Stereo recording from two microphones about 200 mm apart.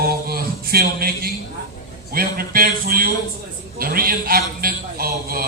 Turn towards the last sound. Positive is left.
turn(degrees=-45)  # may be behind; listen again after turning